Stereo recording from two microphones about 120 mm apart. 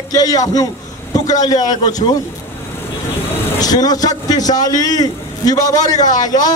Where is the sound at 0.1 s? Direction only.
30° left (ahead or behind).